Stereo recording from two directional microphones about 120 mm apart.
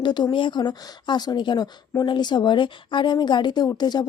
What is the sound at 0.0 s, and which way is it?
Speech, 40° left (ahead or behind).